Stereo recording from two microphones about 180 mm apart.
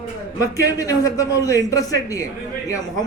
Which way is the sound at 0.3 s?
20° left (ahead or behind).